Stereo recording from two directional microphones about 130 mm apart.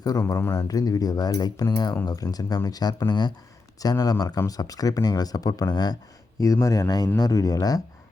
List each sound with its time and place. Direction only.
0.0 s speech: 25° left (ahead or behind)